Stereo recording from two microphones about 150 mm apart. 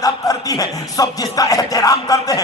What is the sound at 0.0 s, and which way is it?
Music, 25° left (ahead or behind).